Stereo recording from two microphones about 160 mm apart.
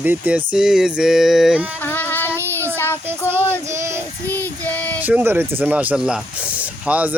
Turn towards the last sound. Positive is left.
turn(degrees=-10)  # may be behind; listen again after turning